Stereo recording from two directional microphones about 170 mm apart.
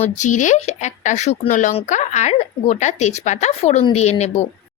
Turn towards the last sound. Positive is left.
turn(degrees=40)  # may be behind; listen again after turning